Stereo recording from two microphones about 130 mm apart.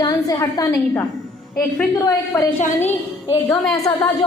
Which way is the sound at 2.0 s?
20° left (ahead or behind).